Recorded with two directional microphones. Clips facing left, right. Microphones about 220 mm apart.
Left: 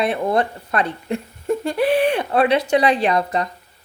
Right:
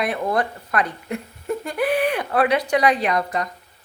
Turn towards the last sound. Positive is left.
turn(degrees=30)  # may be behind; listen again after turning